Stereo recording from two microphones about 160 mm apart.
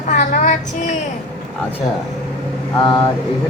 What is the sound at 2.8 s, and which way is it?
Mantra, 25° left (ahead or behind).